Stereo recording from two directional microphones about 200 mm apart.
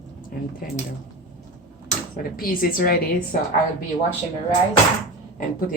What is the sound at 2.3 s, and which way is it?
Speech, 45° left (ahead or behind).